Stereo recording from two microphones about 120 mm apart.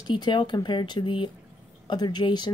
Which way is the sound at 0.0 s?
40° left (ahead or behind).